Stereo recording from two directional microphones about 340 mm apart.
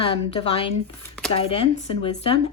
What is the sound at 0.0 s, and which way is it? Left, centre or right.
A woman's voice, centre.